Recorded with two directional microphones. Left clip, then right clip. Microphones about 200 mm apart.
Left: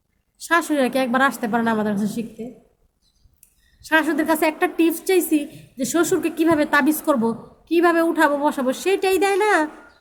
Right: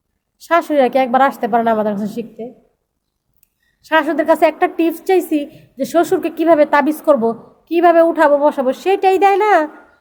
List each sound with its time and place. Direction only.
0.3 s a woman's voice: centre (ahead or behind)
3.8 s a woman's voice: centre (ahead or behind)